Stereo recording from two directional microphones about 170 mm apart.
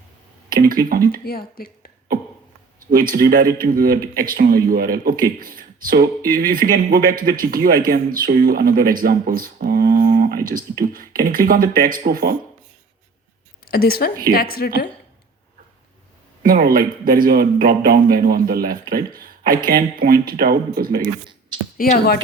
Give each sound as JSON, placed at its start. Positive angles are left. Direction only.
{"t": 0.5, "sound": "a man's voice", "side_deg": -60}
{"t": 1.2, "sound": "a woman's voice", "side_deg": 65}
{"t": 2.8, "sound": "a man's voice", "side_deg": -55}
{"t": 13.7, "sound": "a woman's voice", "side_deg": 65}
{"t": 16.4, "sound": "a man's voice", "side_deg": -60}
{"t": 21.9, "sound": "speech", "side_deg": 65}